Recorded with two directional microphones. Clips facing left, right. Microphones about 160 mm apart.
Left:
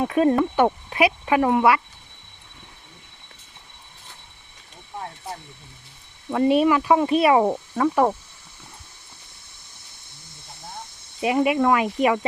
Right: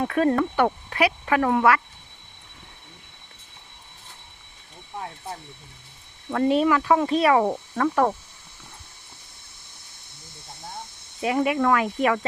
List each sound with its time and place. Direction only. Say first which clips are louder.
0.0 s speech: left 2 dB; 15° left (ahead or behind)
6.3 s speech: left 2 dB; 10° left (ahead or behind)
11.2 s speech: left 2 dB; 15° left (ahead or behind)